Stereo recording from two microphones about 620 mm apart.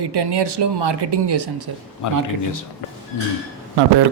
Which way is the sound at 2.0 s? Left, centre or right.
Left.